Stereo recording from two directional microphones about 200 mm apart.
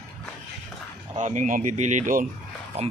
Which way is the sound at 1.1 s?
40° right (ahead or behind).